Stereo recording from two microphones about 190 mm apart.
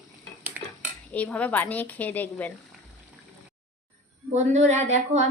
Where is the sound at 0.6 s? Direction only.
10° right (ahead or behind).